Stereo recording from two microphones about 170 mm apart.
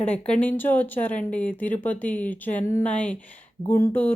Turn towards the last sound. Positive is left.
turn(degrees=10)  # may be behind; listen again after turning